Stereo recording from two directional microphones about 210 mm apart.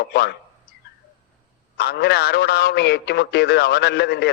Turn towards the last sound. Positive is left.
turn(degrees=50)  # may be behind; listen again after turning